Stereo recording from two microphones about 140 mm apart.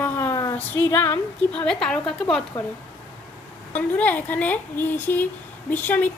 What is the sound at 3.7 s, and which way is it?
A woman's voice, 10° left (ahead or behind).